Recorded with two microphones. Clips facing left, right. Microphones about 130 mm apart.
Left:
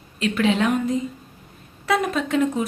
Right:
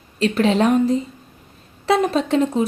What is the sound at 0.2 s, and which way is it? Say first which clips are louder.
Speech: right 3 dB; 35° right (ahead or behind).